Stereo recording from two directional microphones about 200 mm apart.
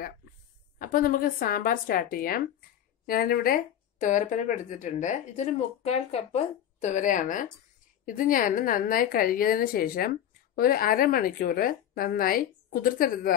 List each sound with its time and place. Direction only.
0.7 s a woman's voice: 45° left (ahead or behind)